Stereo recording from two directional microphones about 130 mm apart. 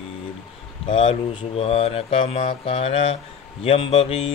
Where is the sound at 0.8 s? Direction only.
40° left (ahead or behind).